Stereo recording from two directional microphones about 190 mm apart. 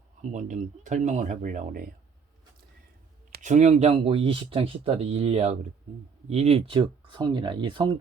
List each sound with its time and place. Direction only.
0.2 s speech: 40° right (ahead or behind)
3.3 s speech: 40° right (ahead or behind)